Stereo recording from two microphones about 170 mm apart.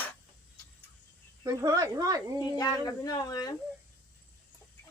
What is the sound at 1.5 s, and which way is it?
Speech, 20° right (ahead or behind).